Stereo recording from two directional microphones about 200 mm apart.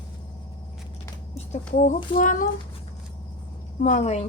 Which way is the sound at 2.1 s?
40° left (ahead or behind).